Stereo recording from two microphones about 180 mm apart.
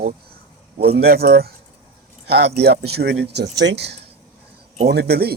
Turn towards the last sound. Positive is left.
turn(degrees=-60)  # may be behind; listen again after turning